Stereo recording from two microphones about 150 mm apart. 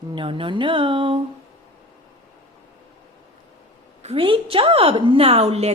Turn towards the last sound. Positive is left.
turn(degrees=-45)  # may be behind; listen again after turning